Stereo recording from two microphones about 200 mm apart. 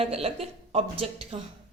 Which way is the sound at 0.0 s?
30° right (ahead or behind).